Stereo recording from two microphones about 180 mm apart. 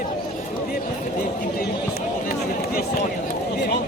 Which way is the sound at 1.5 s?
55° left (ahead or behind).